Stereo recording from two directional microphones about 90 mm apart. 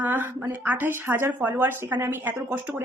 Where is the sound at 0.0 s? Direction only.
20° right (ahead or behind).